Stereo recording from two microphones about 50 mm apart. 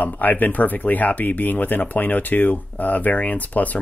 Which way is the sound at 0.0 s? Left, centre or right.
Left.